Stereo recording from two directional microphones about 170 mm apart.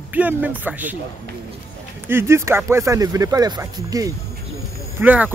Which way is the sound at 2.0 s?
15° right (ahead or behind).